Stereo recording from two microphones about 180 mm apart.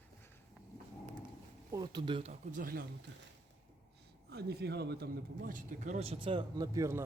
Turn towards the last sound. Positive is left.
turn(degrees=-15)  # may be behind; listen again after turning